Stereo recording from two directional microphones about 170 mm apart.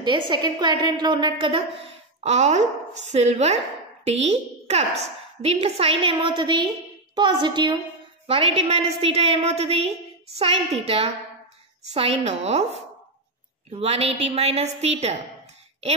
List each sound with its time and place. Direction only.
0.0 s a woman's voice: 25° right (ahead or behind)